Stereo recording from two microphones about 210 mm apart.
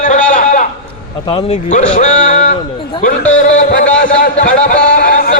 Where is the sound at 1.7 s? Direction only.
35° left (ahead or behind).